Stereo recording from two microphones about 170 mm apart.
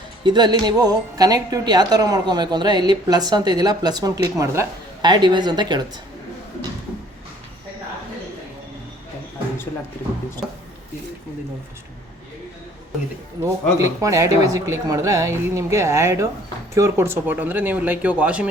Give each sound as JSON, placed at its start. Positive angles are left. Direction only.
{"t": 0.3, "sound": "a woman's voice", "side_deg": -25}
{"t": 13.4, "sound": "speech", "side_deg": -15}